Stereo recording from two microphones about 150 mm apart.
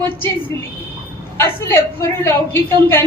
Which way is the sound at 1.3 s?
15° left (ahead or behind).